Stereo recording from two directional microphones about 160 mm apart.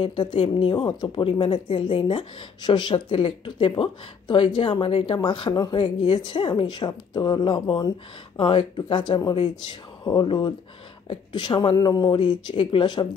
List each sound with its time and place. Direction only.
0.0 s speech: 30° left (ahead or behind)